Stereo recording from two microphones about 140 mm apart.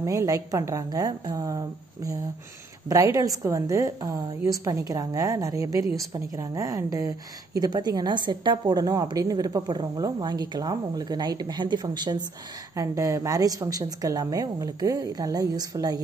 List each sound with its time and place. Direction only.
0.0 s a woman's voice: 25° right (ahead or behind)
2.9 s a woman's voice: 25° right (ahead or behind)